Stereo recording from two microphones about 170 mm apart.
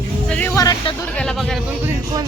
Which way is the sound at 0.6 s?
20° left (ahead or behind).